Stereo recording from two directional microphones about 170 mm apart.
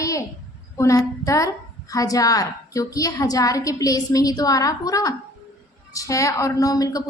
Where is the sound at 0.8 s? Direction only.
20° left (ahead or behind).